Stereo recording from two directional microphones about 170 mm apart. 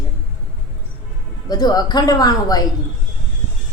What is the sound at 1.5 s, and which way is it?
Speech, 25° left (ahead or behind).